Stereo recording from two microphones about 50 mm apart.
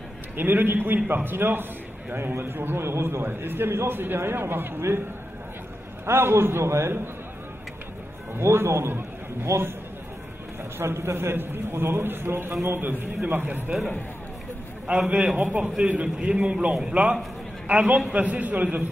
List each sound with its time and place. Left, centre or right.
0.4 s a man's voice: right
6.0 s a man's voice: right
8.4 s a man's voice: right
10.8 s a man's voice: right
15.0 s a man's voice: right
16.2 s a man's voice: right